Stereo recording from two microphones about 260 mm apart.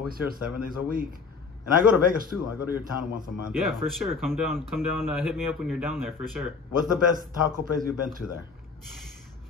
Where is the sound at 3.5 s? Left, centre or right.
Centre.